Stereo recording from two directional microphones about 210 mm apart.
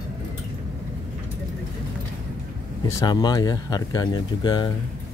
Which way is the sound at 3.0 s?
20° left (ahead or behind).